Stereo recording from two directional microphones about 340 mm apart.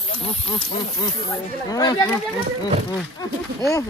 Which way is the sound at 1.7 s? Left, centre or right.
Centre.